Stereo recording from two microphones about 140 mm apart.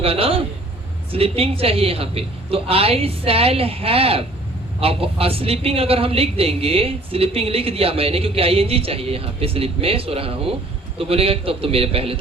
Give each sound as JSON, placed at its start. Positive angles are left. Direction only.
{"t": 0.0, "sound": "a woman's voice", "side_deg": -45}